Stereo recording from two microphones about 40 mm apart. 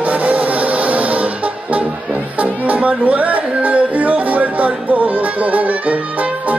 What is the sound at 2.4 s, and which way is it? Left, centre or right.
Music, right.